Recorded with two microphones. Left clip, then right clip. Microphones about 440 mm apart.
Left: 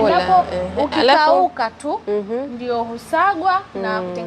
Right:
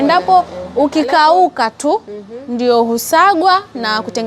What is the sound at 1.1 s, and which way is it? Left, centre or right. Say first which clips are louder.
A woman's voice: right 4 dB; right.